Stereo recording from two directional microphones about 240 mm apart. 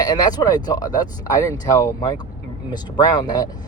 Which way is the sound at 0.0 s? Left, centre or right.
Centre.